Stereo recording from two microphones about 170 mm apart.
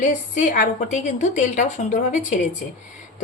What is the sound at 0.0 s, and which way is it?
A woman's voice, 50° left (ahead or behind).